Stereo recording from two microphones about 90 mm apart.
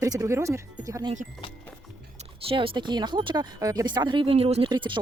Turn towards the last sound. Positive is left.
turn(degrees=-60)  # may be behind; listen again after turning